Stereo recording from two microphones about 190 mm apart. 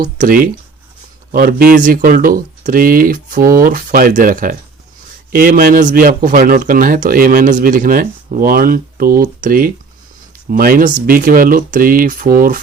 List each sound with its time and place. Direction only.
0.2 s a man's voice: 50° right (ahead or behind)